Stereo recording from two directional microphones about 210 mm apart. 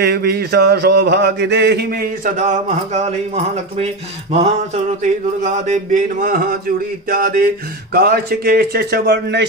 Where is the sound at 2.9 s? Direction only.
30° right (ahead or behind).